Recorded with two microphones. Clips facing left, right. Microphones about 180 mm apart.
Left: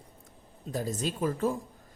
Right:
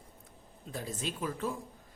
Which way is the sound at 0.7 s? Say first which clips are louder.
Left 6 dB; 40° left (ahead or behind).